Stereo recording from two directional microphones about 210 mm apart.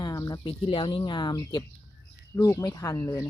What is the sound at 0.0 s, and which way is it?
Speech, 20° left (ahead or behind).